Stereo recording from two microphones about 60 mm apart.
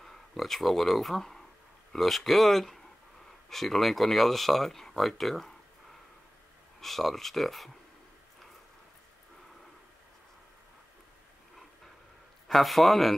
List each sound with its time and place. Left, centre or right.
0.0 s speech: centre
12.4 s speech: centre